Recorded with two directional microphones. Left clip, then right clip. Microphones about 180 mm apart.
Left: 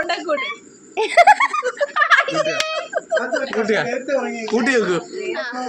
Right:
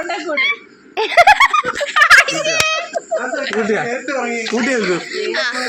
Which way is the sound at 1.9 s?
20° left (ahead or behind).